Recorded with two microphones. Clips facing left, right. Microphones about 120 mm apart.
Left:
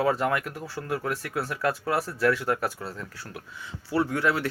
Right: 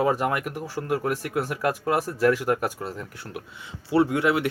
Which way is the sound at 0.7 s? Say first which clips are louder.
Right 4 dB; 25° right (ahead or behind).